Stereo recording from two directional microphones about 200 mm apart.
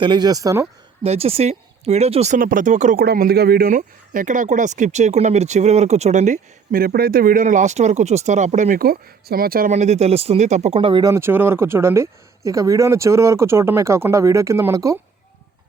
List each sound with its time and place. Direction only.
0.0 s speech: 20° right (ahead or behind)
1.0 s speech: 30° right (ahead or behind)
3.0 s speech: 50° right (ahead or behind); by 14.9 s 15° right (ahead or behind)